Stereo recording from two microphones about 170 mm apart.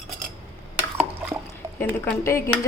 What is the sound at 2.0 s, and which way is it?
Speech, 15° left (ahead or behind).